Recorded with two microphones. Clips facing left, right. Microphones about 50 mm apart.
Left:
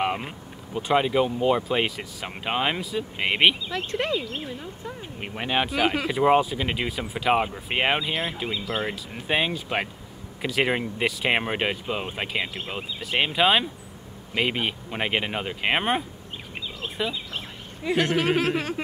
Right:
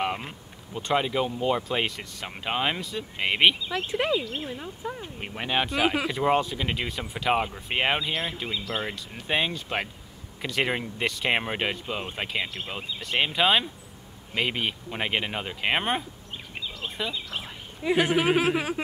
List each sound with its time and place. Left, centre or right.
0.0 s a sound: centre
0.7 s speech: centre
3.7 s speech: centre
5.0 s speech: centre
16.8 s a sound: centre
17.8 s speech: centre